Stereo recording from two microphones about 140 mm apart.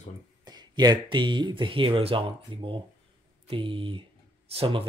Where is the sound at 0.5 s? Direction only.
30° right (ahead or behind).